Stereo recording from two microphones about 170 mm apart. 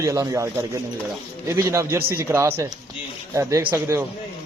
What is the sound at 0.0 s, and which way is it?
A man's voice, 20° right (ahead or behind).